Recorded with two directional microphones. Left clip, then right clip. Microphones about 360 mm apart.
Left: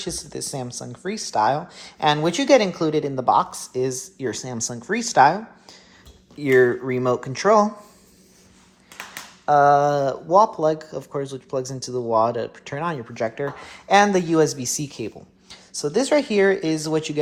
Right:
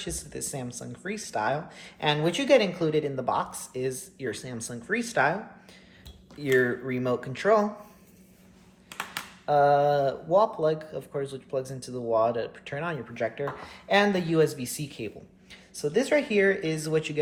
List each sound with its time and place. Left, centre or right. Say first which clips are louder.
0.0 s speech: left 6 dB; centre
6.4 s speech: left 7 dB; centre
9.5 s speech: left 6 dB; centre